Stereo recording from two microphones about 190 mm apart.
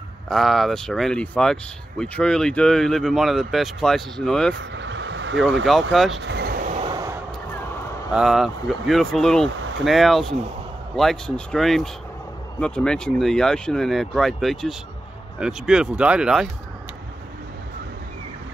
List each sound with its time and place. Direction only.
0.3 s speech: centre (ahead or behind)
4.6 s vehicle: 70° right (ahead or behind)
5.7 s speech: centre (ahead or behind)
6.1 s vehicle: 65° right (ahead or behind); by 6.8 s 50° right (ahead or behind)
6.8 s a sound: 25° right (ahead or behind)
8.1 s speech: centre (ahead or behind)